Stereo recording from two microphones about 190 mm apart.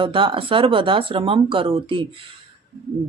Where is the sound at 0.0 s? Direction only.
25° right (ahead or behind).